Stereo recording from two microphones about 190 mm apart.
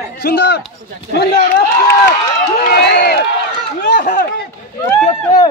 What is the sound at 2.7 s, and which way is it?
Speech, 55° left (ahead or behind).